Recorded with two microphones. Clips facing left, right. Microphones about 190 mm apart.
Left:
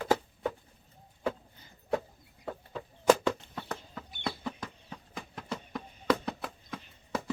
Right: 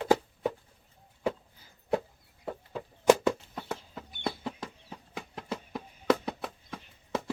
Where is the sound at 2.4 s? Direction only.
10° right (ahead or behind).